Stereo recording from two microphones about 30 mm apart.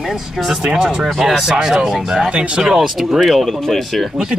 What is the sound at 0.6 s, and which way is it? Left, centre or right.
Speech, right.